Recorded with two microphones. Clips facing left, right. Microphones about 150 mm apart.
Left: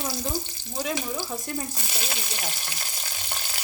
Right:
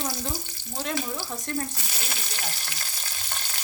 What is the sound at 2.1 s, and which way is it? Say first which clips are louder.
Frying: left 2 dB; 20° left (ahead or behind).